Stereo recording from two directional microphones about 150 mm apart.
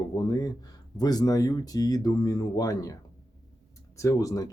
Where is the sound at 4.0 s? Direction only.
20° left (ahead or behind).